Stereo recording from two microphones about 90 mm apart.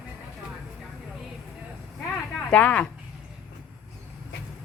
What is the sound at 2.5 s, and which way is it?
Speech, 15° left (ahead or behind).